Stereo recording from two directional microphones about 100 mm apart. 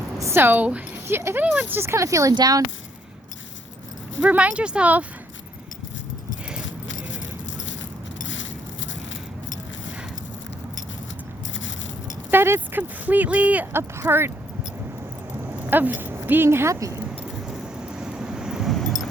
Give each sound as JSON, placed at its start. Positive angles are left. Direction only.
{"t": 0.2, "sound": "a woman's voice", "side_deg": -25}
{"t": 4.2, "sound": "speech", "side_deg": -15}
{"t": 12.3, "sound": "speech", "side_deg": -20}
{"t": 15.6, "sound": "speech", "side_deg": -15}
{"t": 17.5, "sound": "vehicle", "side_deg": -10}